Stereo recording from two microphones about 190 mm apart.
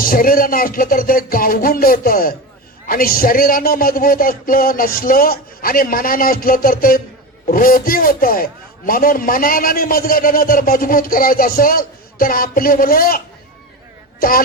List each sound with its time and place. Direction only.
0.0 s a man's voice: 50° left (ahead or behind)